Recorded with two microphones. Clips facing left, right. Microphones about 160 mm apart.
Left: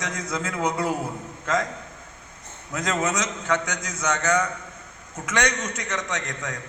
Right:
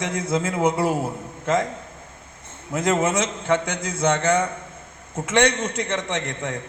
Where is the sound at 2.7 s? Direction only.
25° right (ahead or behind).